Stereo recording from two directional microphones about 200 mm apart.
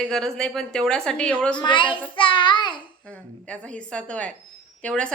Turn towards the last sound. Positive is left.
turn(degrees=5)  # may be behind; listen again after turning